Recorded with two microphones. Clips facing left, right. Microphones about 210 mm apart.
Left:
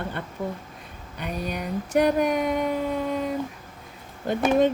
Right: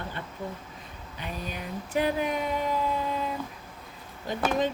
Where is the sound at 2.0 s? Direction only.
50° left (ahead or behind).